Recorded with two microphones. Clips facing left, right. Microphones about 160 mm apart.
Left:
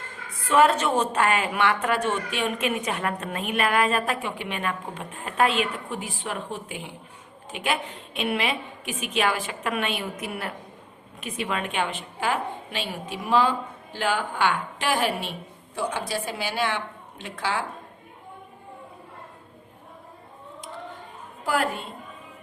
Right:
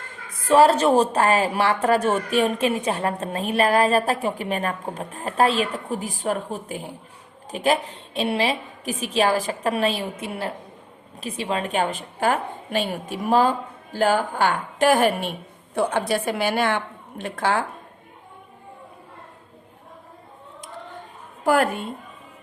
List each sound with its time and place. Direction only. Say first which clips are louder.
0.4 s a woman's voice: right 4 dB; 35° right (ahead or behind); by 17.6 s 50° right (ahead or behind)
21.4 s a woman's voice: right 6 dB; 50° right (ahead or behind)